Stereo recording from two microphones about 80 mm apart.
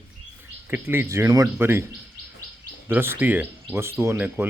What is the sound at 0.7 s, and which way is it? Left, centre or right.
Speech, right.